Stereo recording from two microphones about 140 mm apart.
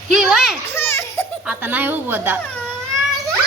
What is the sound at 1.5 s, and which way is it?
Speech, 10° right (ahead or behind).